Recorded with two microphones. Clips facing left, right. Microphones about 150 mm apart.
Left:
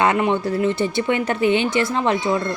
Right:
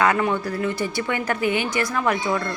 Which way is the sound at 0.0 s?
25° left (ahead or behind).